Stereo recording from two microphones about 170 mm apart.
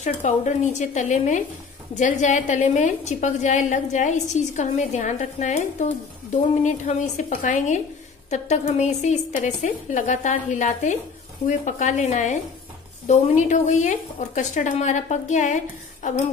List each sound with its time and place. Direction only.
0.0 s a woman's voice: 45° left (ahead or behind)